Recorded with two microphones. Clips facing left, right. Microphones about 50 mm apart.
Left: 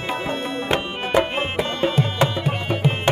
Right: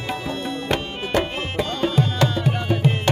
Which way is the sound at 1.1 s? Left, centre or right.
Centre.